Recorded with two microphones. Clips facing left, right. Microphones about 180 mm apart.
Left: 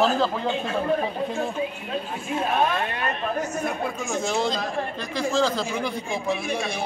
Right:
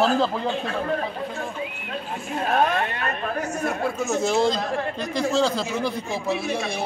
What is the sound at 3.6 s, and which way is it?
Speech, 5° right (ahead or behind).